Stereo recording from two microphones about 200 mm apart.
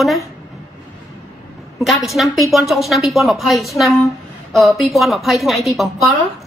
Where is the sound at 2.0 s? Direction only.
Centre (ahead or behind).